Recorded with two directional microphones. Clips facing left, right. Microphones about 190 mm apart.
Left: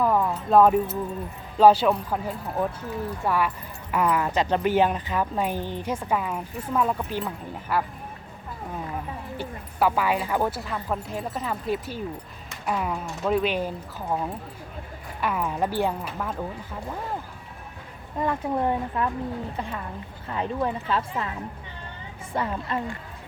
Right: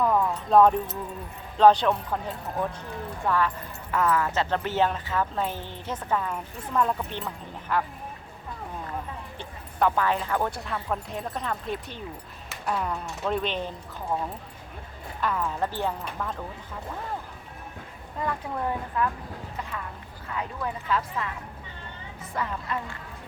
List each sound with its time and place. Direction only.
0.0 s speech: 5° left (ahead or behind)
9.4 s speech: 5° left (ahead or behind)
15.2 s speech: 10° left (ahead or behind)
18.2 s a woman's voice: 25° left (ahead or behind)
22.3 s speech: 30° left (ahead or behind)